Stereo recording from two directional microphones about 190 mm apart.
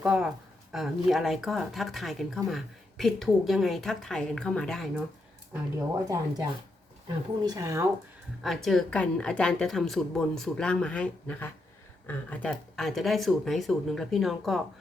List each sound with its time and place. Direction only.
0.0 s speech: 5° right (ahead or behind)
5.7 s speech: 15° right (ahead or behind)
8.4 s speech: centre (ahead or behind)